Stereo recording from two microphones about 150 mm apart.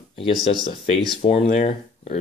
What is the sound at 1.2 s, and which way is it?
Speech, 45° left (ahead or behind).